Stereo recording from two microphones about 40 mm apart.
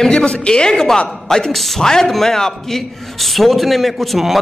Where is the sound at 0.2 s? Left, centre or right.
Left.